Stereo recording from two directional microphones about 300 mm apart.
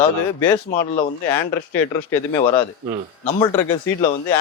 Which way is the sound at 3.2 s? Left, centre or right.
Left.